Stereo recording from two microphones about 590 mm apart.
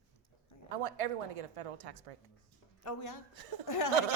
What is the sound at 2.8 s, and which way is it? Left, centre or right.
Speech, left.